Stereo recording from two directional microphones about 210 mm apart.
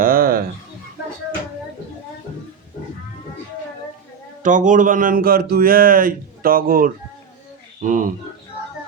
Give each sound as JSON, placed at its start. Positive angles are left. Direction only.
{"t": 0.0, "sound": "music", "side_deg": -45}
{"t": 4.4, "sound": "speech", "side_deg": -35}